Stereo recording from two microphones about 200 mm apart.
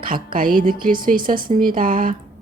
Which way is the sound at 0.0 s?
45° right (ahead or behind).